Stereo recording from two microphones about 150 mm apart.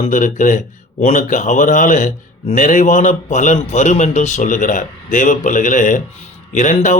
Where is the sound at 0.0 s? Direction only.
55° left (ahead or behind).